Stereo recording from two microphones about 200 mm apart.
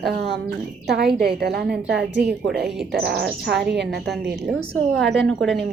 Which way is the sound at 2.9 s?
55° right (ahead or behind).